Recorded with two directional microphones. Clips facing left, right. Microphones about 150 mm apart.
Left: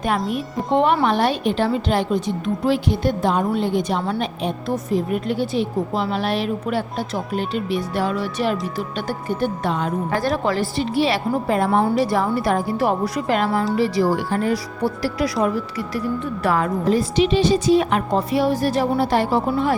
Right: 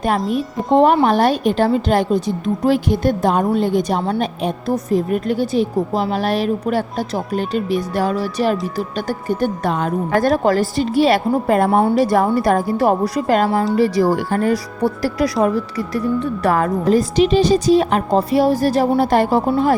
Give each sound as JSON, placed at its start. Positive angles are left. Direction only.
{"t": 0.2, "sound": "speech", "side_deg": 0}
{"t": 0.7, "sound": "a woman's voice", "side_deg": -40}
{"t": 16.5, "sound": "a woman's voice", "side_deg": -45}